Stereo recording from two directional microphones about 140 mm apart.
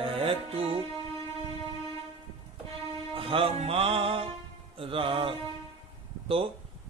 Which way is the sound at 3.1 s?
40° right (ahead or behind).